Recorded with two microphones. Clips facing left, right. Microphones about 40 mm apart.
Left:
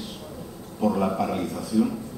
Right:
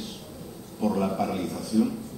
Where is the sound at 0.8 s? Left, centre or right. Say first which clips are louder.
Left 2 dB; centre.